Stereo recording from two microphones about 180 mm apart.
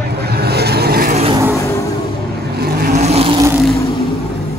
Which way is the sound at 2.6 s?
55° right (ahead or behind).